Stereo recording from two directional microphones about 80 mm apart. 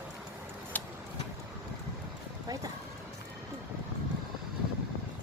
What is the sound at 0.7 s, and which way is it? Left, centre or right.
Vehicle, left.